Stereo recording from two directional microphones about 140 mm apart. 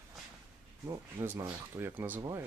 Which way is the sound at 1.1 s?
15° right (ahead or behind).